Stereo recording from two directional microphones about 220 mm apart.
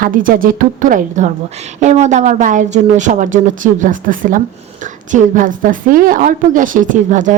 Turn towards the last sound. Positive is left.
turn(degrees=-35)  # may be behind; listen again after turning